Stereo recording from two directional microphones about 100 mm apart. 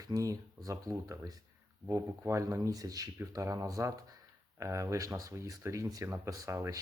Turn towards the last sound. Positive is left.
turn(degrees=-35)  # may be behind; listen again after turning